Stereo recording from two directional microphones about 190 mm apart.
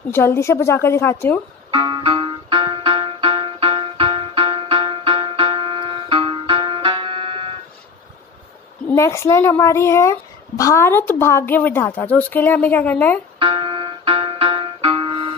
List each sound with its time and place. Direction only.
0.1 s a child's voice: 10° left (ahead or behind)
1.7 s music: 25° right (ahead or behind)
8.9 s a child's voice: 15° left (ahead or behind)
13.4 s music: 25° right (ahead or behind)